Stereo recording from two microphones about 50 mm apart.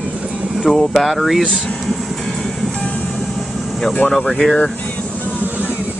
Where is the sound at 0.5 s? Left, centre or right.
Centre.